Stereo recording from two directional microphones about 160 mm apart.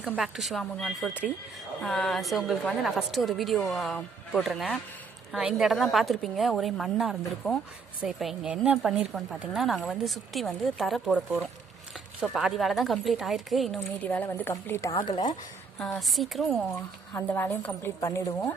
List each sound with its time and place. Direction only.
0.0 s a woman's voice: centre (ahead or behind)
13.7 s a woman's voice: 10° left (ahead or behind)
15.1 s speech: 50° left (ahead or behind)
15.8 s a woman's voice: centre (ahead or behind)
17.1 s a woman's voice: 15° left (ahead or behind)